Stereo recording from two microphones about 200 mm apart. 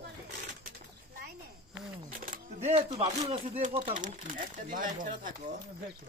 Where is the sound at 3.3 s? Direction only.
30° right (ahead or behind).